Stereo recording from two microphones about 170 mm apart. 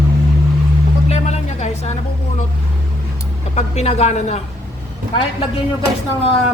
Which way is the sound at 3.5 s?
40° left (ahead or behind).